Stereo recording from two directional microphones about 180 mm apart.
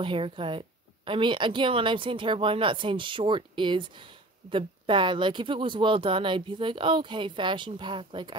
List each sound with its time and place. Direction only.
0.0 s speech: 30° right (ahead or behind)